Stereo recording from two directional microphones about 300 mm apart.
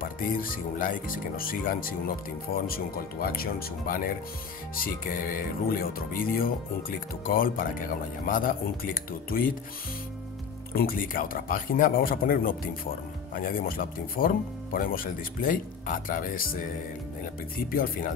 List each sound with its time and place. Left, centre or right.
0.0 s speech: left
10.7 s speech: left
17.6 s speech: left